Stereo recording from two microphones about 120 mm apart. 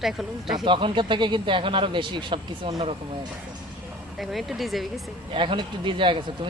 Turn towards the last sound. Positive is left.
turn(degrees=-45)  # may be behind; listen again after turning